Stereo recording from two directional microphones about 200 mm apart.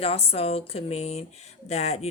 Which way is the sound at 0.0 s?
30° left (ahead or behind).